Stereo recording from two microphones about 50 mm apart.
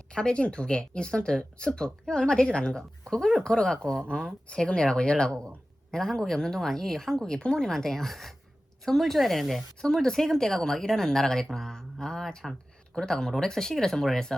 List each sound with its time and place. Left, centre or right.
0.1 s a woman's voice: centre